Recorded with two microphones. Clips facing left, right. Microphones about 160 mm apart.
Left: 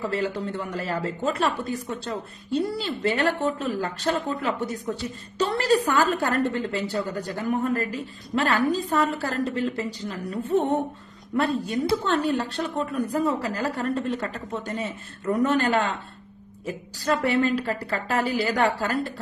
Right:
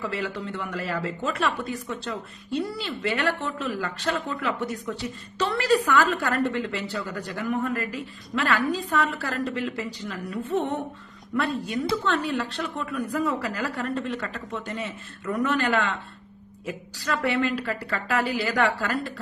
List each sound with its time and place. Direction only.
0.1 s a woman's voice: 40° left (ahead or behind)
11.3 s a woman's voice: 40° left (ahead or behind)